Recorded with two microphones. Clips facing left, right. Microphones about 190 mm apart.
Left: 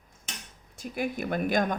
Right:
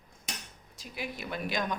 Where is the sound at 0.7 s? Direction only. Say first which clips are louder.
Left 8 dB; 50° left (ahead or behind).